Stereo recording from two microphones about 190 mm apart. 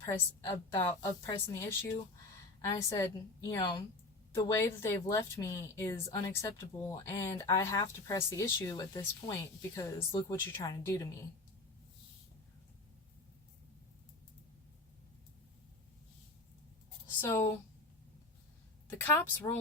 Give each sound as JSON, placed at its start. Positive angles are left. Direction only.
{"t": 0.0, "sound": "speech", "side_deg": 20}
{"t": 17.2, "sound": "speech", "side_deg": 15}
{"t": 18.9, "sound": "speech", "side_deg": 15}